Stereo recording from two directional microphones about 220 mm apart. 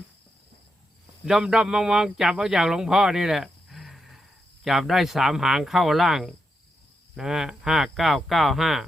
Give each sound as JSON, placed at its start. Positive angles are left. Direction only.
{"t": 1.2, "sound": "speech", "side_deg": -5}